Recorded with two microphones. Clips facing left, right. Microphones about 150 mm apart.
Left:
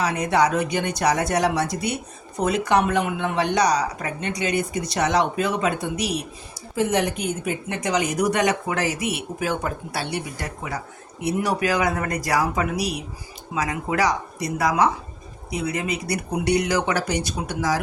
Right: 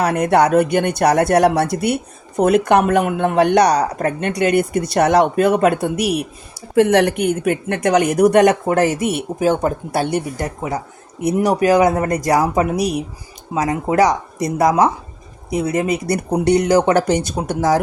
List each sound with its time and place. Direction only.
0.0 s speech: 55° right (ahead or behind)